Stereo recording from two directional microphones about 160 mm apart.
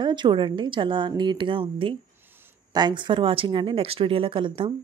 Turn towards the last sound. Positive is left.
turn(degrees=-30)  # may be behind; listen again after turning